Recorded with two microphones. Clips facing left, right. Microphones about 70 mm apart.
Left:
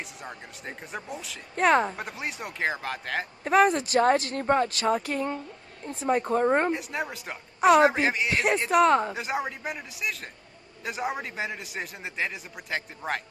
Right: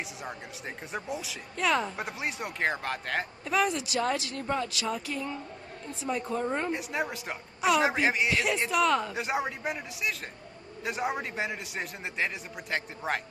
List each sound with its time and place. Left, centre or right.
0.0 s a man's voice: centre
1.5 s speech: left
2.0 s a man's voice: centre
3.4 s speech: left
6.7 s a man's voice: centre
8.3 s speech: left
8.8 s speech: left
9.1 s a man's voice: centre